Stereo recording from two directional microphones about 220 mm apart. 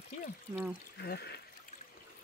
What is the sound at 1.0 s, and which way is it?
Speech, 45° left (ahead or behind).